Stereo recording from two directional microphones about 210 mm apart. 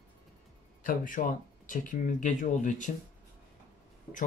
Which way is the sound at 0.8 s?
40° left (ahead or behind).